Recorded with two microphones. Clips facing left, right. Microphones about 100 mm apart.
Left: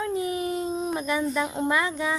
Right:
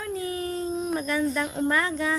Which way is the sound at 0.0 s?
20° left (ahead or behind).